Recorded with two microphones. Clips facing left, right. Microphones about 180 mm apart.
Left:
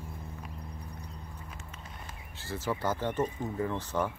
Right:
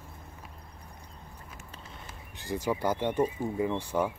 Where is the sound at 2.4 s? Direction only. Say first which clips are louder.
Right 3 dB; 15° right (ahead or behind).